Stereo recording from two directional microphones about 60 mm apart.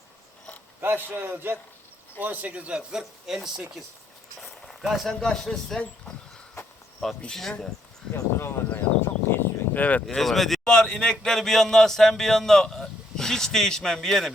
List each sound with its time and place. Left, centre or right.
0.8 s a man's voice: right
2.7 s speech: centre
4.4 s a sound: centre
4.8 s speech: centre
5.0 s speech: centre
8.1 s speech: left
8.7 s a sound: left
9.8 s speech: left
10.2 s speech: centre
10.6 s speech: centre